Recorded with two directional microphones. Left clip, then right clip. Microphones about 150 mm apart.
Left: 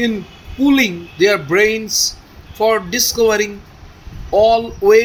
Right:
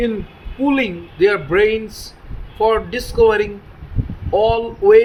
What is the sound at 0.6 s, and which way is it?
Speech, 35° left (ahead or behind).